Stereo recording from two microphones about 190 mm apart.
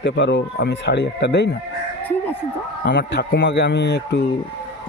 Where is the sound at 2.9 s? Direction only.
65° left (ahead or behind).